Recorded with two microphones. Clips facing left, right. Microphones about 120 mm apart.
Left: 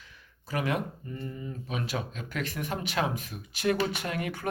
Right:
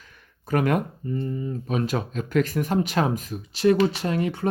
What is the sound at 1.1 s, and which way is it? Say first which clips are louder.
Speech: right 11 dB; 35° right (ahead or behind).